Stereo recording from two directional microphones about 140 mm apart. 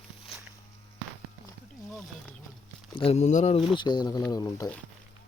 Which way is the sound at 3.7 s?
35° left (ahead or behind).